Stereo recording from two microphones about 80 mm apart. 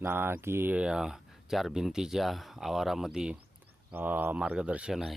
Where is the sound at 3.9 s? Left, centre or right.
Right; by 5.1 s centre.